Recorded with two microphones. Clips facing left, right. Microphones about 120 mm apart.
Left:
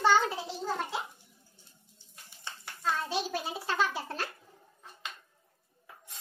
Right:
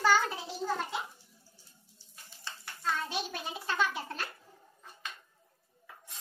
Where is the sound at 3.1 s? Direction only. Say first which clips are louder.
Left 4 dB; 30° left (ahead or behind).